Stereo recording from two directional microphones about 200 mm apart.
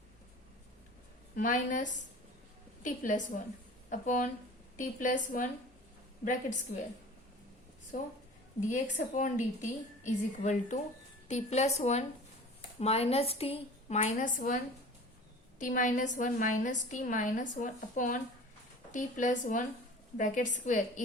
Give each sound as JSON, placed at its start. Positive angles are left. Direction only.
{"t": 1.4, "sound": "a woman's voice", "side_deg": 40}
{"t": 7.9, "sound": "a woman's voice", "side_deg": 40}